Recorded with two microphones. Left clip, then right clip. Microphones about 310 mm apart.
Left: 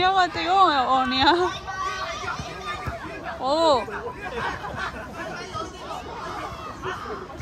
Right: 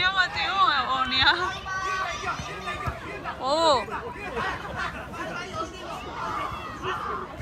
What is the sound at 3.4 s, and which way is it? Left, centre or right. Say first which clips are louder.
Speech: left 2 dB; centre.